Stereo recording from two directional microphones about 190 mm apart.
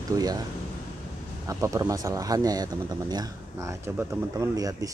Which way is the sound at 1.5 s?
15° right (ahead or behind).